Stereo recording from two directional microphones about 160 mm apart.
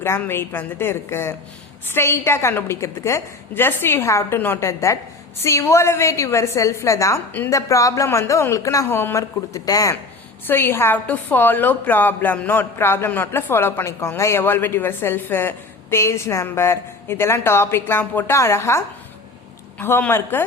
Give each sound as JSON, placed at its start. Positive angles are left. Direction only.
{"t": 0.0, "sound": "a woman's voice", "side_deg": 15}
{"t": 19.8, "sound": "a woman's voice", "side_deg": 15}